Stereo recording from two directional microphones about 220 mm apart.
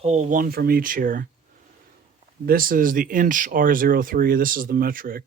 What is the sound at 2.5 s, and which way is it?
Speech, 40° right (ahead or behind).